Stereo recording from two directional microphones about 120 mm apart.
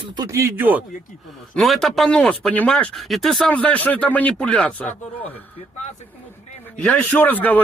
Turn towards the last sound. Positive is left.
turn(degrees=15)  # may be behind; listen again after turning